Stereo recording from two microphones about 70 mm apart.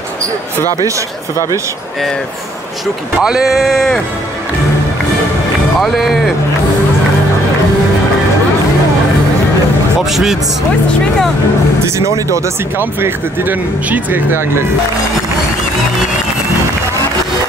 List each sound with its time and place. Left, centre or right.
3.2 s speech: centre
5.8 s speech: centre
10.0 s speech: centre
12.7 s speech: right